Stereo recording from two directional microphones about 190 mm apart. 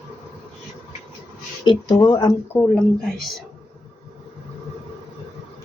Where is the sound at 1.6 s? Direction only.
20° left (ahead or behind).